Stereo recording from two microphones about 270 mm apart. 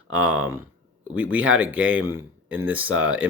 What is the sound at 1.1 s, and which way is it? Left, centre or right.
Speech, centre.